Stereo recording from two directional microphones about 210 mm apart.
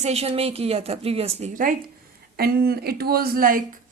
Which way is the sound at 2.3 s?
45° right (ahead or behind).